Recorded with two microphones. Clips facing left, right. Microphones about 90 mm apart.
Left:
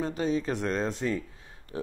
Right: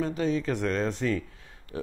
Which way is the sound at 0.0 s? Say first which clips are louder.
Right 1 dB; 25° left (ahead or behind).